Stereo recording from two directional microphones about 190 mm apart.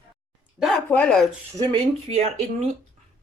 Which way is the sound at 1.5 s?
30° right (ahead or behind).